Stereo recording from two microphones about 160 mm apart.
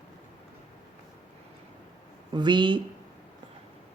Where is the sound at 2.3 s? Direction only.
30° right (ahead or behind).